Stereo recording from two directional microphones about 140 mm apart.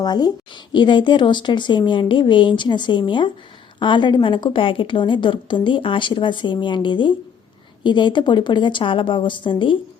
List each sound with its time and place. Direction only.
0.0 s speech: 30° left (ahead or behind)